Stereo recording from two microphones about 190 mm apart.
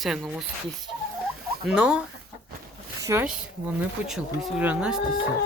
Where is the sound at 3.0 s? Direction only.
15° right (ahead or behind).